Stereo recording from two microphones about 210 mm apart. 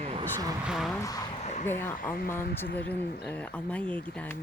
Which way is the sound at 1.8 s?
10° left (ahead or behind).